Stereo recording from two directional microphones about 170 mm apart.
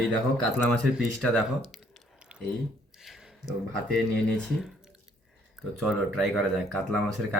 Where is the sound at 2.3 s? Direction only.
5° right (ahead or behind).